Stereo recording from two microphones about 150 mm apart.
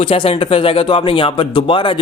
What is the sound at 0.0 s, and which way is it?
Speech, 40° left (ahead or behind).